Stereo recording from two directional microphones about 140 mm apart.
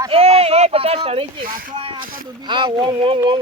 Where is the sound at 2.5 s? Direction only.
35° right (ahead or behind).